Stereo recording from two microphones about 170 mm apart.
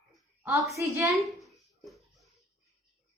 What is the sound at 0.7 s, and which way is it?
Speech, 20° right (ahead or behind).